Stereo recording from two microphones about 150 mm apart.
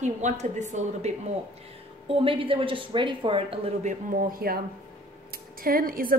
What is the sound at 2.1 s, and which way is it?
Speech, 35° right (ahead or behind).